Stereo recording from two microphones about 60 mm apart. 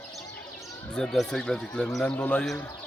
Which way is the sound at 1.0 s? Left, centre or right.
Centre.